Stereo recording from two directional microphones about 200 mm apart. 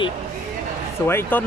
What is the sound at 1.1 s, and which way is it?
Speech, 10° left (ahead or behind).